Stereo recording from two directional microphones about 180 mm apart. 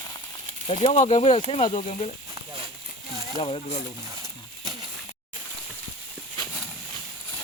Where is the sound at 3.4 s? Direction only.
35° left (ahead or behind).